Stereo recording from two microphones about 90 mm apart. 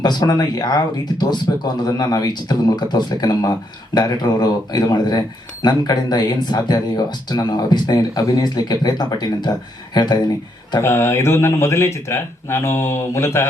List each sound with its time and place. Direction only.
0.0 s speech: 50° left (ahead or behind)
10.8 s speech: 30° left (ahead or behind)